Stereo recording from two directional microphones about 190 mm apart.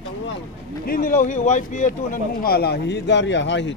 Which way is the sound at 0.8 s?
50° left (ahead or behind).